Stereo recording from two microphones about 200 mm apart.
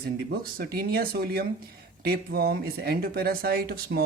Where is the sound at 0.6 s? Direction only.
50° right (ahead or behind).